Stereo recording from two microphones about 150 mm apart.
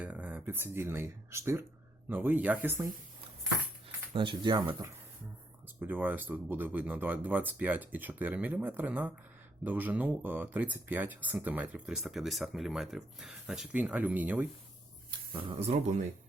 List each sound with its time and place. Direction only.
0.0 s speech: 10° right (ahead or behind)
4.1 s speech: 35° right (ahead or behind)
5.6 s speech: 10° right (ahead or behind)
15.3 s speech: 35° right (ahead or behind)
15.5 s speech: 45° right (ahead or behind)